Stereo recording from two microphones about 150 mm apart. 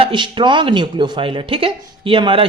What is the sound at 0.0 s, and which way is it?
Speech, 35° right (ahead or behind).